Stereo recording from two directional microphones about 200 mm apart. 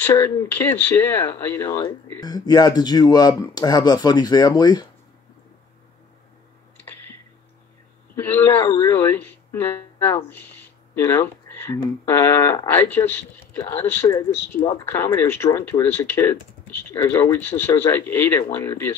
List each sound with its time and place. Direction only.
0.0 s speech: 15° left (ahead or behind)
8.2 s speech: 10° left (ahead or behind)